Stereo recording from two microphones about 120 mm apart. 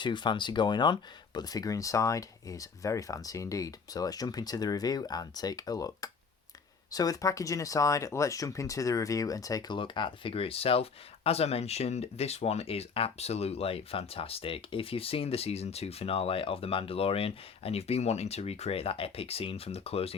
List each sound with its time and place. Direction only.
0.0 s speech: 40° left (ahead or behind)
9.7 s speech: 45° left (ahead or behind)